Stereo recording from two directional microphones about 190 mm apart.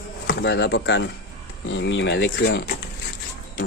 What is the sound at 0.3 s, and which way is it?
Speech, 65° left (ahead or behind).